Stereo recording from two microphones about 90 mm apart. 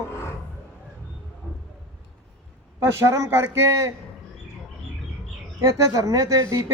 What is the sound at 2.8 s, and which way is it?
A woman's voice, 30° right (ahead or behind).